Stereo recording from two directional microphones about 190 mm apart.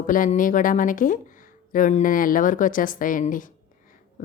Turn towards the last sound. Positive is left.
turn(degrees=45)  # may be behind; listen again after turning